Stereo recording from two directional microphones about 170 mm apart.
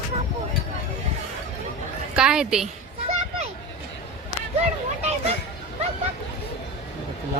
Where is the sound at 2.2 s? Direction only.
5° right (ahead or behind).